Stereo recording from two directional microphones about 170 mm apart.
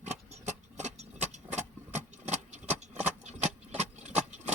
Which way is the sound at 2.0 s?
45° right (ahead or behind).